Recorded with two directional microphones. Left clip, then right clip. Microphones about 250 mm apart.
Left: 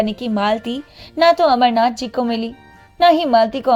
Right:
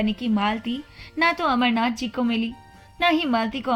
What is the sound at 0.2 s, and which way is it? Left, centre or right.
A woman's voice, left.